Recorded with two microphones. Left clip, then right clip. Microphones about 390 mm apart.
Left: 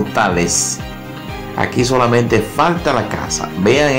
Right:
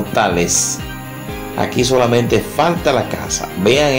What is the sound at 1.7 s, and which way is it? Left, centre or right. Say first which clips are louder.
Speech: even; right.